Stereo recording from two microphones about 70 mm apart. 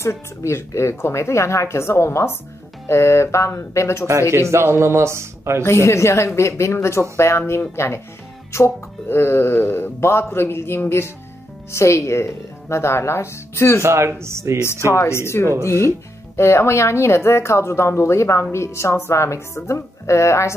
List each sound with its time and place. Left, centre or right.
0.0 s speech: left
4.3 s speech: right
5.6 s speech: left
13.8 s speech: right
14.9 s speech: left